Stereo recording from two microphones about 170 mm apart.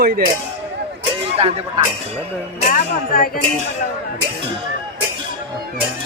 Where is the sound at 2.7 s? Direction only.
60° left (ahead or behind).